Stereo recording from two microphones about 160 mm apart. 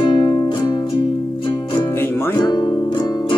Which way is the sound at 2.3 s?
25° left (ahead or behind).